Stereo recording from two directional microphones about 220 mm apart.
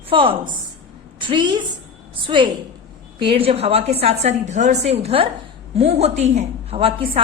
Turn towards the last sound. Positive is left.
turn(degrees=-25)  # may be behind; listen again after turning